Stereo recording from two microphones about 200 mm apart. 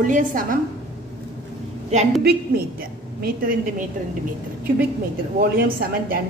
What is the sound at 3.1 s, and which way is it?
Speech, 50° right (ahead or behind).